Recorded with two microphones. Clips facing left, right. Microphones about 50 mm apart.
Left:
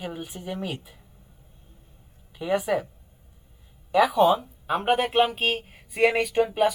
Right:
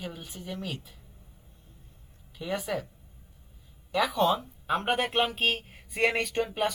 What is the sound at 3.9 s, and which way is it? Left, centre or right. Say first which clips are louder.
A man's voice: left 6 dB; centre.